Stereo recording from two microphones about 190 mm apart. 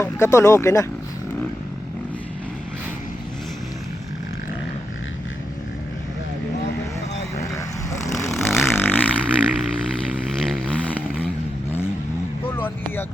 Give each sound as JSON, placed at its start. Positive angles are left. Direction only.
{"t": 0.0, "sound": "speech", "side_deg": 15}
{"t": 8.0, "sound": "vehicle", "side_deg": 15}
{"t": 8.6, "sound": "a sound", "side_deg": 10}
{"t": 10.8, "sound": "vehicle", "side_deg": 10}
{"t": 12.5, "sound": "vehicle", "side_deg": 10}